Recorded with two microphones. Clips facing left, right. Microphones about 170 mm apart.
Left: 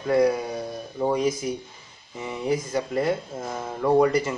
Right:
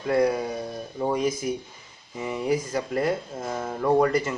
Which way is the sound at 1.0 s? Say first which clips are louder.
Left 1 dB; centre (ahead or behind).